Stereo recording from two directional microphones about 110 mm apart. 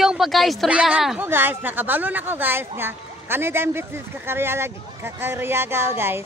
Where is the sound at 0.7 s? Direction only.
10° right (ahead or behind).